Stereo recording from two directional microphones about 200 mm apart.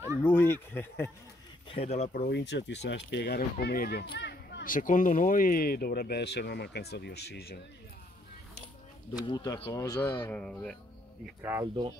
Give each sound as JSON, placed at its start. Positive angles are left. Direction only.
{"t": 0.2, "sound": "speech", "side_deg": 10}
{"t": 1.7, "sound": "speech", "side_deg": 30}
{"t": 2.1, "sound": "speech", "side_deg": 55}
{"t": 9.1, "sound": "speech", "side_deg": 20}
{"t": 11.4, "sound": "speech", "side_deg": -15}